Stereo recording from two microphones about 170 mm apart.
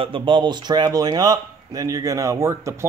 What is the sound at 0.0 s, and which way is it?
Speech, 30° right (ahead or behind).